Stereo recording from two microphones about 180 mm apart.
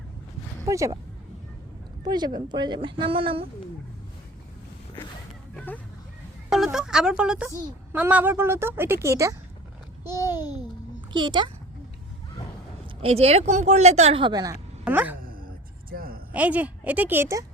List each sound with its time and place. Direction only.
0.6 s speech: 15° right (ahead or behind)
2.0 s speech: 25° right (ahead or behind)
5.5 s speech: 10° left (ahead or behind)
6.5 s a woman's voice: centre (ahead or behind)
11.1 s speech: 25° right (ahead or behind)
13.0 s speech: 35° right (ahead or behind)
14.8 s speech: 10° right (ahead or behind)
15.2 s music: 55° right (ahead or behind)
16.3 s a woman's voice: 10° right (ahead or behind)